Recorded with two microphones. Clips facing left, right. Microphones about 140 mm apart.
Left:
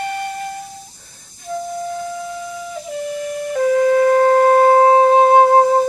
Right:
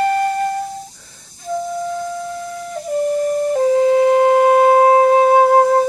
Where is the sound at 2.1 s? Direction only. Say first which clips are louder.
Right 1 dB; 55° right (ahead or behind); by 5.8 s centre (ahead or behind).